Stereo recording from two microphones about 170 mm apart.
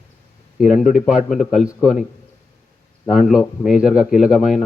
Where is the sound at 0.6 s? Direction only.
50° left (ahead or behind).